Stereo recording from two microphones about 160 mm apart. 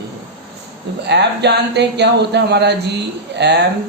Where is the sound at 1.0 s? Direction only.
90° right.